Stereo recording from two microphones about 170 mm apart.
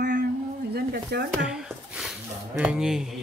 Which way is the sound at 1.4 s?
5° right (ahead or behind).